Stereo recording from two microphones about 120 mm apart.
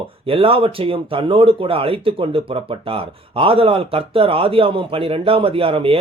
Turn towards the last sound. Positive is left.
turn(degrees=-50)  # may be behind; listen again after turning